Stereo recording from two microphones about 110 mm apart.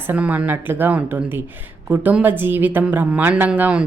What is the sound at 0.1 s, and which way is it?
A woman's voice, 15° right (ahead or behind).